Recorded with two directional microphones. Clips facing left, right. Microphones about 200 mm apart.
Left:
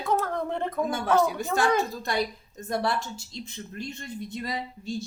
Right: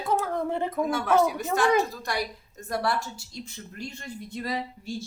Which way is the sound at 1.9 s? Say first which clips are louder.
Left 3 dB; 25° left (ahead or behind).